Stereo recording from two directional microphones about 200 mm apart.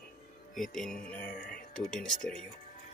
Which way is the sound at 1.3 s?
45° left (ahead or behind).